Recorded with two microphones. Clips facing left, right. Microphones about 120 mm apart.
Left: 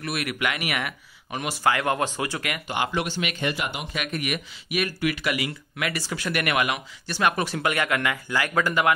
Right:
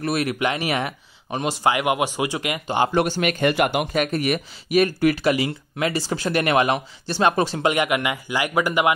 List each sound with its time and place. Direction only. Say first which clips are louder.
0.0 s speech: right 6 dB; 30° right (ahead or behind)
2.6 s speech: right 7 dB; 30° right (ahead or behind)
2.9 s speech: right 7 dB; 45° right (ahead or behind); by 8.9 s 15° right (ahead or behind)